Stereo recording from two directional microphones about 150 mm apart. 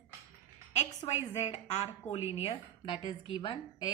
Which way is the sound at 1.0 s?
30° left (ahead or behind).